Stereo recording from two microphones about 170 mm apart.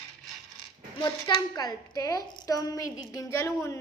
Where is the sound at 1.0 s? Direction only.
20° left (ahead or behind).